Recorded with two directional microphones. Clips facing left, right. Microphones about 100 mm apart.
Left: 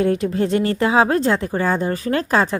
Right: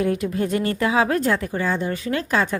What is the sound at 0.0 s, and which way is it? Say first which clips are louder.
A woman's voice: left 4 dB; 30° left (ahead or behind).